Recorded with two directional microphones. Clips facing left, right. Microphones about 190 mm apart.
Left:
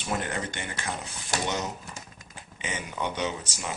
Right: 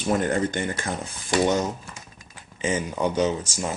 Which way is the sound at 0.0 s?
45° right (ahead or behind).